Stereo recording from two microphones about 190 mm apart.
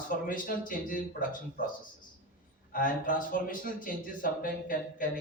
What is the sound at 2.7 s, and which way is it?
Speech, 45° left (ahead or behind).